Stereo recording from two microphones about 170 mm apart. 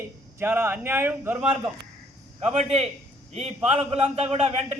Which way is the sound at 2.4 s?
40° right (ahead or behind).